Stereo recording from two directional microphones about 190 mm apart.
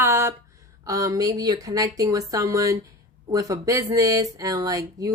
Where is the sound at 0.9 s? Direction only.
15° right (ahead or behind).